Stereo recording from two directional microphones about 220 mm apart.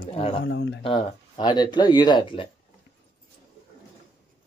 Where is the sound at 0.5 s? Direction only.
50° left (ahead or behind).